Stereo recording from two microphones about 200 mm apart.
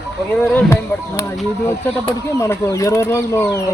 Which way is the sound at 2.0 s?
15° left (ahead or behind).